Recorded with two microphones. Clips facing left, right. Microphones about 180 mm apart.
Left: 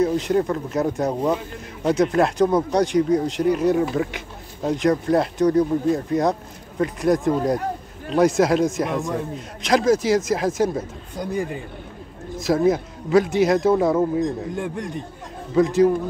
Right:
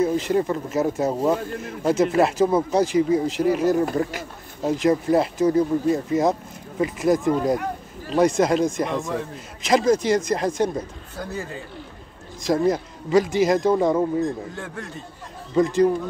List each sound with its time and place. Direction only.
0.0 s speech: centre (ahead or behind)
11.1 s speech: 15° left (ahead or behind)
12.4 s speech: 5° left (ahead or behind)
14.6 s speech: 15° left (ahead or behind)
15.5 s speech: centre (ahead or behind)